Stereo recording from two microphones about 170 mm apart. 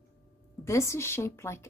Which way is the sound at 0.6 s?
15° left (ahead or behind).